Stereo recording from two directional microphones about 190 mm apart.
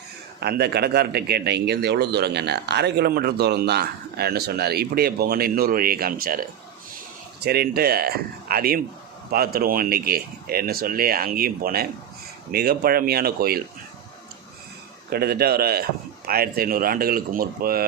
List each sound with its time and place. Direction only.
0.3 s a man's voice: 55° right (ahead or behind)
7.4 s a man's voice: 55° right (ahead or behind)
15.1 s speech: 55° right (ahead or behind)